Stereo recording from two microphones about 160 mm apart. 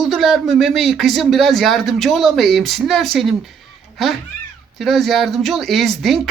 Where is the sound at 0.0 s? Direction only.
Centre (ahead or behind).